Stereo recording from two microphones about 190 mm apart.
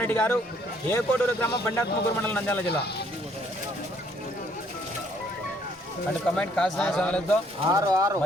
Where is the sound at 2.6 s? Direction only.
60° left (ahead or behind).